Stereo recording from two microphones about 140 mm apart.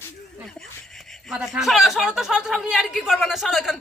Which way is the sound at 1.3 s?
5° right (ahead or behind).